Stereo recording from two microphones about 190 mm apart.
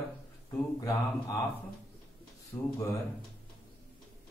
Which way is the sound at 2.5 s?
15° left (ahead or behind).